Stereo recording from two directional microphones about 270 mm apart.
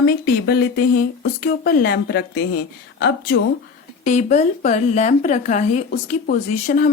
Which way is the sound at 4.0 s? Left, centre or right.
Left.